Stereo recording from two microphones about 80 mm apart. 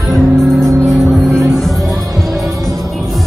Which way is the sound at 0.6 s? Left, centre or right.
Right.